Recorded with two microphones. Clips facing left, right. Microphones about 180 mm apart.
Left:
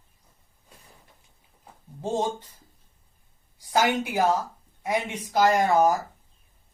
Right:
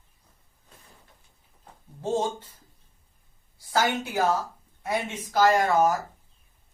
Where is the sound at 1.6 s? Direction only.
15° left (ahead or behind).